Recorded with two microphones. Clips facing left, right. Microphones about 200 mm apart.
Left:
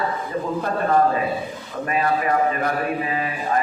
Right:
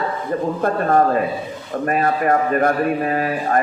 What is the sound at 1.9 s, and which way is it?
A man's voice, 50° right (ahead or behind).